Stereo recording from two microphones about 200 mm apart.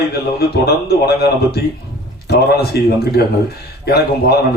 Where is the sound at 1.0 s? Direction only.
55° left (ahead or behind).